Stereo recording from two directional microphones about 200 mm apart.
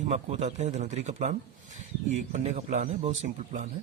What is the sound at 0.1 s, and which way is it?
Speech, 35° right (ahead or behind).